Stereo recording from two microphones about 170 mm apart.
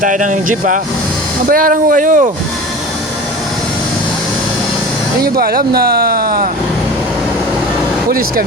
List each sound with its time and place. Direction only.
0.0 s speech: 50° right (ahead or behind)
5.2 s speech: 65° right (ahead or behind)